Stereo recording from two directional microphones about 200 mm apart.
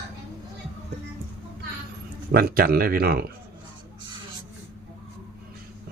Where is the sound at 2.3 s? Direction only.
50° right (ahead or behind).